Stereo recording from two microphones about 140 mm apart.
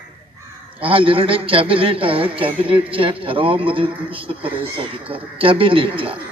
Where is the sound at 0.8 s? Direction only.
40° right (ahead or behind).